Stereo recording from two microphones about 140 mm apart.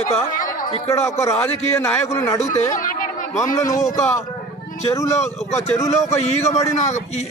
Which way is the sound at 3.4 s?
20° left (ahead or behind).